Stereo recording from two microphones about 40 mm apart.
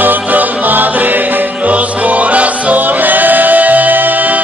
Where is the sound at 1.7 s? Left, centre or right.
Right.